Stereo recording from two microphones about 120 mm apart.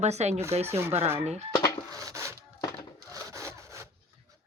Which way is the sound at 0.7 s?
20° right (ahead or behind).